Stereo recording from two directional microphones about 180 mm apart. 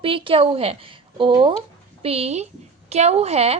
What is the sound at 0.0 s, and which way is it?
A woman's voice, 30° right (ahead or behind).